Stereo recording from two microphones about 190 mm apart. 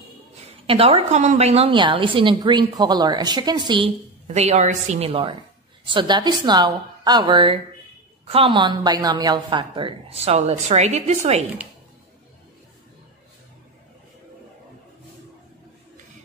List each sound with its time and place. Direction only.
0.7 s a woman's voice: 30° right (ahead or behind)
4.3 s a woman's voice: 35° right (ahead or behind)